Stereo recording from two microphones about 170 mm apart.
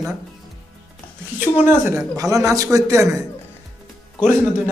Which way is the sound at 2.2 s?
20° right (ahead or behind).